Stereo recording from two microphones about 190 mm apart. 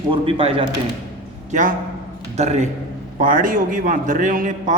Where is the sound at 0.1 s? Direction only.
30° right (ahead or behind).